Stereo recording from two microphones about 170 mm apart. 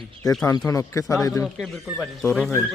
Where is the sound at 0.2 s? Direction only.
20° left (ahead or behind).